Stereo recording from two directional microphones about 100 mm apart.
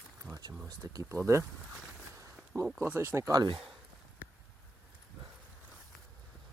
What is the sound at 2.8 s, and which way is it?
Speech, 25° right (ahead or behind).